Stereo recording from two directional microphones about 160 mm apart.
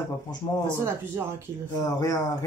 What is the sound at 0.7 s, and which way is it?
Speech, 15° right (ahead or behind).